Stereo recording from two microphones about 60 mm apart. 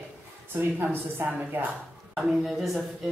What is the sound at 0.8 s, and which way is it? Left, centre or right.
Speech, right.